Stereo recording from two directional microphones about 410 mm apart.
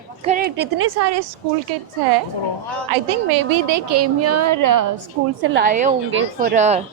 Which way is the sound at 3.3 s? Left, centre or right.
Right.